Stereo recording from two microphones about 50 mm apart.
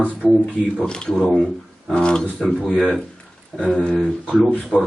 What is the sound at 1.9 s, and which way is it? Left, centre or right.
Speech, centre.